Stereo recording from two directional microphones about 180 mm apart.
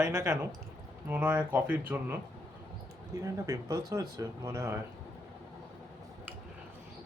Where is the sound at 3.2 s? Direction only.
20° right (ahead or behind).